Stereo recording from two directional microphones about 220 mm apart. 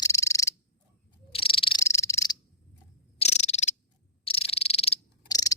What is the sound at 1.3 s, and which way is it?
Cricket, 25° left (ahead or behind).